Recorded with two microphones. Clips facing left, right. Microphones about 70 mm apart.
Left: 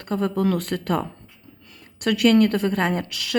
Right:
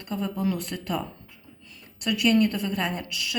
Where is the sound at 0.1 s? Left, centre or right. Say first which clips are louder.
Left 6 dB; left.